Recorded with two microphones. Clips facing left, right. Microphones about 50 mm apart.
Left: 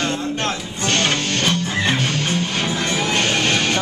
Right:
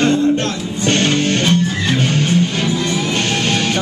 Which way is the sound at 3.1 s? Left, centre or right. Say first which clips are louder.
Right 1 dB; centre.